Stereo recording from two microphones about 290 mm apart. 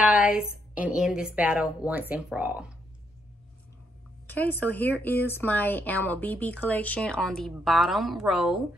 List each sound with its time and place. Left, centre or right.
0.4 s speech: centre
4.3 s speech: centre